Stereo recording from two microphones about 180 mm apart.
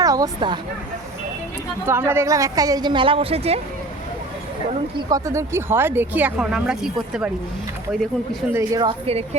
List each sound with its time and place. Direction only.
0.0 s vehicle: 20° right (ahead or behind)
1.9 s a woman's voice: 15° right (ahead or behind); by 3.6 s 35° right (ahead or behind)
5.0 s speech: 20° right (ahead or behind)
8.5 s a woman's voice: 20° right (ahead or behind)
8.9 s a woman's voice: 35° right (ahead or behind)